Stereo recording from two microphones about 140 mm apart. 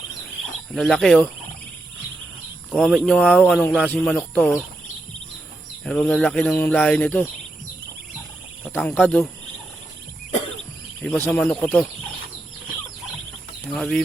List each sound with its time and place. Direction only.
0.7 s speech: 5° left (ahead or behind)
2.6 s speech: 5° left (ahead or behind)
5.8 s speech: 5° left (ahead or behind)
8.7 s speech: 10° left (ahead or behind)
11.0 s speech: 5° left (ahead or behind)
13.7 s speech: 5° left (ahead or behind)